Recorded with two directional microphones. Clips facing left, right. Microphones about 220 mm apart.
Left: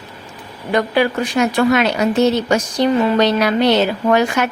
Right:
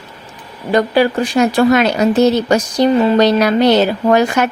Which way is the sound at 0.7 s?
35° right (ahead or behind).